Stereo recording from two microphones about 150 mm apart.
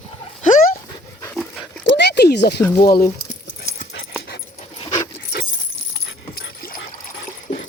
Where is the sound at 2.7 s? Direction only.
80° left.